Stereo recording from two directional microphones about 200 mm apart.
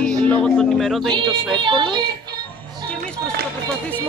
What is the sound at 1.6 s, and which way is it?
Speech, 25° right (ahead or behind).